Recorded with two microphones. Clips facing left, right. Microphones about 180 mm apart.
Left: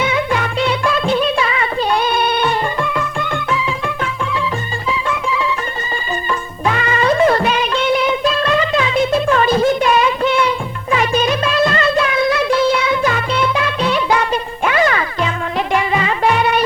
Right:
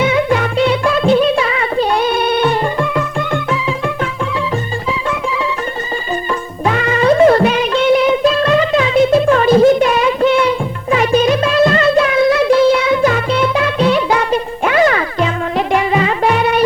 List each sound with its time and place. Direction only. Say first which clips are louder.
0.0 s music: right 4 dB; 45° right (ahead or behind)
6.7 s music: right 3 dB; 40° right (ahead or behind)